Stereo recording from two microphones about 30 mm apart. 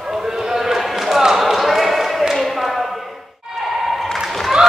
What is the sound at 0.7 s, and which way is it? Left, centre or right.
Basketball bounce, centre.